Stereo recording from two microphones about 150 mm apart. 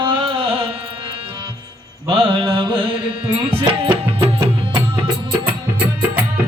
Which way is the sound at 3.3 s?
35° right (ahead or behind).